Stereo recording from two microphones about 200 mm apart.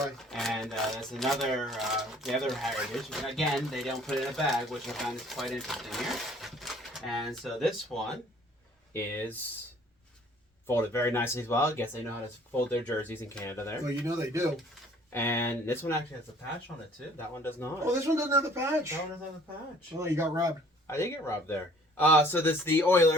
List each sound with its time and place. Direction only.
0.3 s speech: centre (ahead or behind)
10.7 s speech: 10° left (ahead or behind)
13.8 s speech: 15° right (ahead or behind)
15.1 s speech: 10° left (ahead or behind)
17.2 s speech: 10° left (ahead or behind)
17.8 s speech: 15° right (ahead or behind)
20.8 s speech: 15° left (ahead or behind)